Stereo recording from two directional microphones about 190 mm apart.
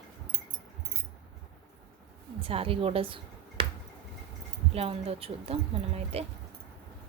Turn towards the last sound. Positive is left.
turn(degrees=-30)  # may be behind; listen again after turning